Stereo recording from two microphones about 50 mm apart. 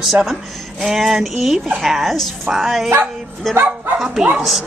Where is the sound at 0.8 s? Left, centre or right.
Centre.